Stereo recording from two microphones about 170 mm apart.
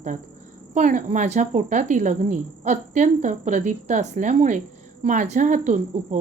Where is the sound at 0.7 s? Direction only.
45° right (ahead or behind).